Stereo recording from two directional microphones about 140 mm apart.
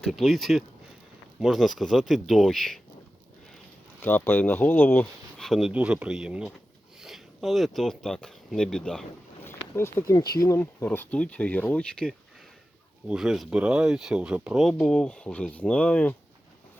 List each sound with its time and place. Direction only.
0.0 s speech: centre (ahead or behind)
4.0 s speech: 15° left (ahead or behind)
5.4 s speech: centre (ahead or behind)
9.4 s speech: 15° left (ahead or behind)